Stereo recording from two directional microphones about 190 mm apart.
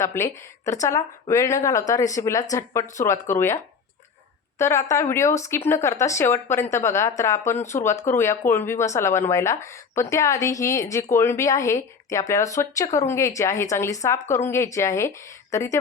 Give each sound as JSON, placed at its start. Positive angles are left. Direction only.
{"t": 0.0, "sound": "speech", "side_deg": 15}